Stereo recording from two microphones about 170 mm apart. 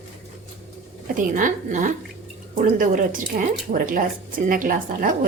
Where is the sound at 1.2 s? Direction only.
55° right (ahead or behind).